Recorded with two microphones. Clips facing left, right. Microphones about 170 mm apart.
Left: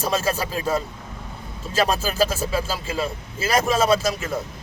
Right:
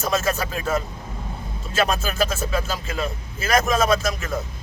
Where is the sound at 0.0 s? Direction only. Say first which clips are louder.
Even; 30° left (ahead or behind).